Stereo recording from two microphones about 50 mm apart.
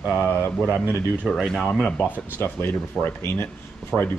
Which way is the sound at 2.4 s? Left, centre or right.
Left.